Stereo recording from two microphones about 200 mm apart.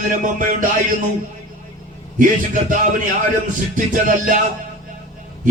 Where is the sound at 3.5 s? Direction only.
40° right (ahead or behind).